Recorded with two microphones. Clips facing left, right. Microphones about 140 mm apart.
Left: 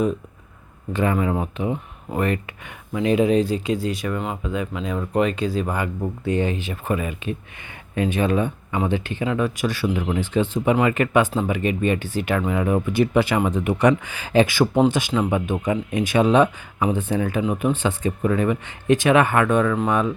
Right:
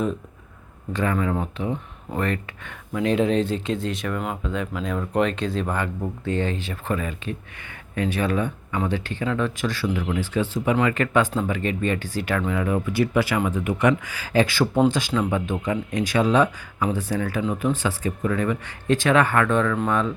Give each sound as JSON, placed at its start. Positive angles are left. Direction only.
{"t": 0.9, "sound": "speech", "side_deg": 20}